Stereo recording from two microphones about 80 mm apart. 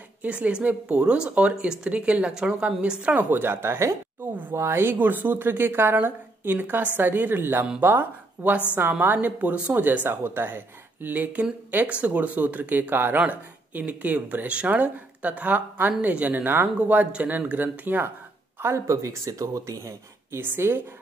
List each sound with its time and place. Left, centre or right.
0.2 s speech: centre
3.2 s speech: right
18.6 s speech: right